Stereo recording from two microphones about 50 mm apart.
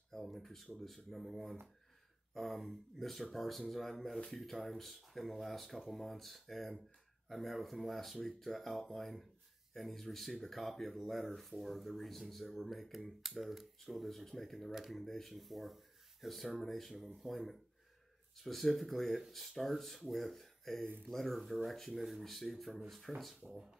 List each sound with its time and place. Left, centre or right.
0.1 s speech: centre
14.7 s speech: centre
15.0 s speech: centre
20.8 s speech: right
21.1 s speech: centre